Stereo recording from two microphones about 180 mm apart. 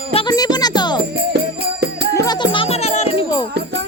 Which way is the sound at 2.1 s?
20° left (ahead or behind).